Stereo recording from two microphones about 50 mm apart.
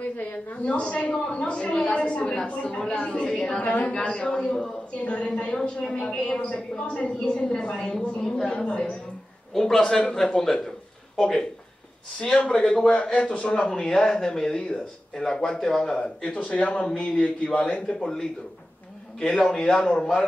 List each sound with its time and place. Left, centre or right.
0.2 s a sound: left
0.7 s a woman's voice: left
8.5 s speech: left
9.5 s a woman's voice: centre
12.2 s speech: left
19.1 s a woman's voice: centre